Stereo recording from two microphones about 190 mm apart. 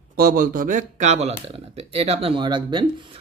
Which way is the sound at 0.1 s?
50° right (ahead or behind).